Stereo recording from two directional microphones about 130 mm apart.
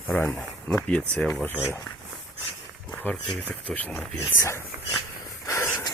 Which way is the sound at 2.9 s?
5° left (ahead or behind).